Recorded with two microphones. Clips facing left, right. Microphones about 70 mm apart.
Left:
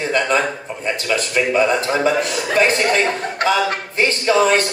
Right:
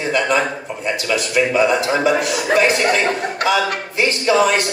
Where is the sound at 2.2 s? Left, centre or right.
Left.